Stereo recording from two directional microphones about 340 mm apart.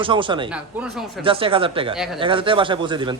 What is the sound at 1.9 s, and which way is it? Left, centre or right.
Speech, centre.